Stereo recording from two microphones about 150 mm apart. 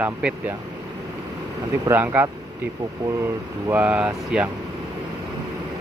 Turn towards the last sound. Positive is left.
turn(degrees=-10)  # may be behind; listen again after turning